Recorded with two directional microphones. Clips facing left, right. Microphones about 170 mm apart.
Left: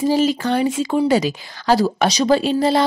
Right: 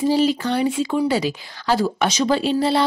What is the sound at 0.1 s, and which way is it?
A woman's voice, 45° left (ahead or behind).